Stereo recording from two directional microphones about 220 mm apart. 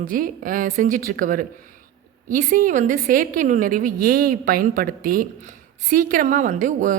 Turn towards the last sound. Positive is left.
turn(degrees=-35)  # may be behind; listen again after turning